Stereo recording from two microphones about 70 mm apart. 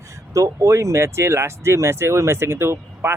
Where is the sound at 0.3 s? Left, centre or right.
Right.